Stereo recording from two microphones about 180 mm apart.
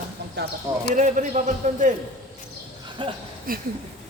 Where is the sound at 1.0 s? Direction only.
45° right (ahead or behind).